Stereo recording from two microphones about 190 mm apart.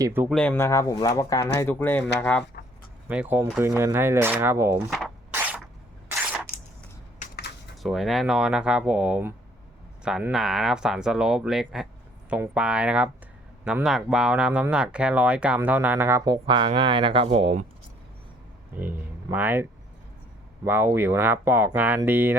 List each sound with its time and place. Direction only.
0.0 s speech: 10° right (ahead or behind)
0.3 s speech: 5° left (ahead or behind)
2.5 s a sound: 55° left (ahead or behind)
3.1 s speech: 10° right (ahead or behind)
4.9 s rub: centre (ahead or behind)
5.3 s a sound: 10° right (ahead or behind)
7.8 s speech: centre (ahead or behind); by 17.7 s 30° right (ahead or behind)
18.8 s speech: 10° right (ahead or behind)
20.7 s speech: 10° right (ahead or behind)